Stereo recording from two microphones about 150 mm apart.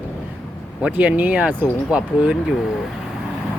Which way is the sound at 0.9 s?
10° right (ahead or behind).